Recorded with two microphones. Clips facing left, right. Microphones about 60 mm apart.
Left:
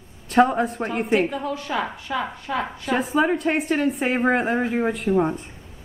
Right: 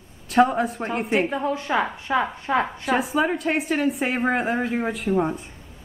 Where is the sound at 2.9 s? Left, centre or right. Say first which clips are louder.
Left 3 dB; centre.